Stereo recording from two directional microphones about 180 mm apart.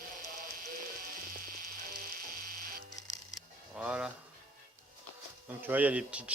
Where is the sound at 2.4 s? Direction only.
60° right (ahead or behind).